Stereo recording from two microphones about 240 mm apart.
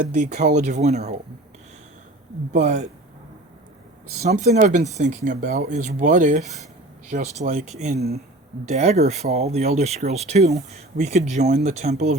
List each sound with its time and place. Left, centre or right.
0.0 s speech: right
2.5 s speech: right
4.2 s speech: right